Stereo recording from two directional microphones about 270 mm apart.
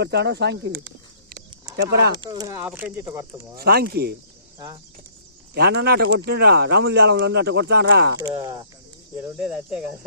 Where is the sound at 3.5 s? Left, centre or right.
Right.